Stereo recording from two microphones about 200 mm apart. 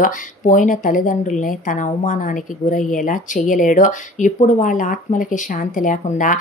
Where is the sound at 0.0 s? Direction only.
40° left (ahead or behind).